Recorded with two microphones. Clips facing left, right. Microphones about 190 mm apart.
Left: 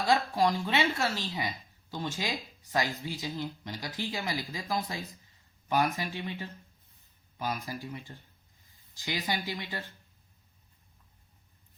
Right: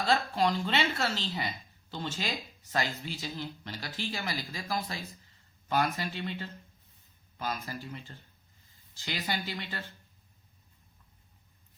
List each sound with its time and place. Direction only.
0.0 s speech: 15° left (ahead or behind)